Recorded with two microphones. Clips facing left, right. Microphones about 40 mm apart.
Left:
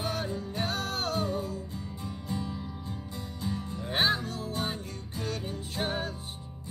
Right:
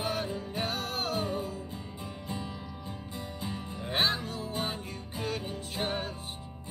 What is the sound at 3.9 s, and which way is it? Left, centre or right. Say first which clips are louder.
Music: left 2 dB; centre.